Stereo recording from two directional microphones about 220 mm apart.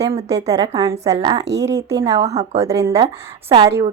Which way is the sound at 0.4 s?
20° right (ahead or behind).